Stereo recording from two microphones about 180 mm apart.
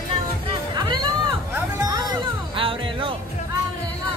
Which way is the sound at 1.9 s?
20° right (ahead or behind).